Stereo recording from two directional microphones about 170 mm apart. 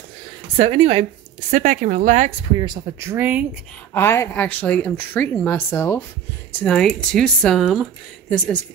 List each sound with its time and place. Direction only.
0.6 s speech: 35° right (ahead or behind)
1.5 s speech: 45° right (ahead or behind)
2.5 s speech: 25° right (ahead or behind)
3.9 s speech: 15° left (ahead or behind)